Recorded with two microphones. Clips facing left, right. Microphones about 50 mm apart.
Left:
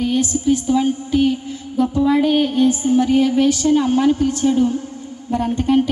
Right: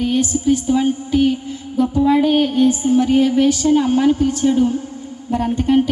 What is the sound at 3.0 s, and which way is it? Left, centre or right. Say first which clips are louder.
Speech: right 1 dB; right.